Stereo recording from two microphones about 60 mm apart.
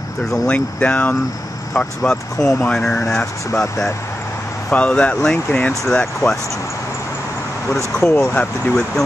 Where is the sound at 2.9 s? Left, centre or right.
Left.